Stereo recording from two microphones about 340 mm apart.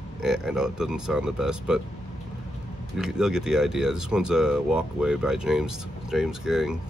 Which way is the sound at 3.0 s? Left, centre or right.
Centre.